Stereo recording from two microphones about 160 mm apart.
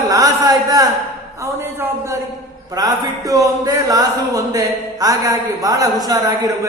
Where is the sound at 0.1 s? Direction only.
20° right (ahead or behind).